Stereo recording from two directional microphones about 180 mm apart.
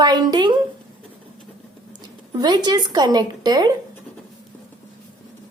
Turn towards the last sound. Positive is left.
turn(degrees=-20)  # may be behind; listen again after turning